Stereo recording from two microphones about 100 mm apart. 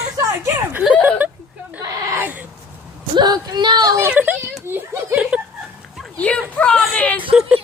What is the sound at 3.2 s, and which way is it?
Speech, 45° right (ahead or behind).